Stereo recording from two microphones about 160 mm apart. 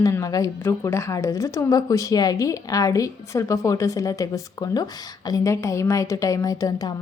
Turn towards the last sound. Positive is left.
turn(degrees=25)  # may be behind; listen again after turning